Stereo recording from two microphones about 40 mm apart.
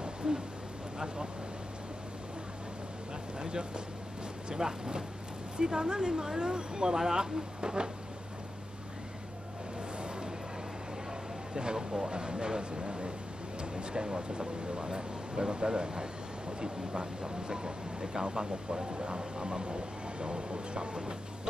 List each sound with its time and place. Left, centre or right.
0.0 s a sound: right
0.9 s speech: right
3.3 s a man's voice: right
9.8 s vehicle: right
11.5 s speech: centre